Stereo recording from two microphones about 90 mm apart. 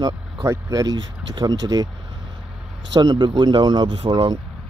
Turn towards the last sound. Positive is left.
turn(degrees=-65)  # may be behind; listen again after turning